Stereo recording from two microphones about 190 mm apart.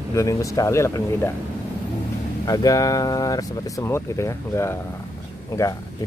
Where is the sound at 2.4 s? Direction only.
20° left (ahead or behind).